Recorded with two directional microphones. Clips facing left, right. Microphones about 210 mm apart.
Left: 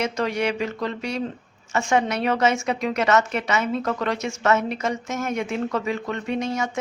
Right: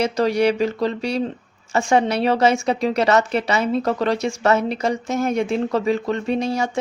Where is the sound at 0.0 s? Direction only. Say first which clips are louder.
Right 6 dB; 35° right (ahead or behind).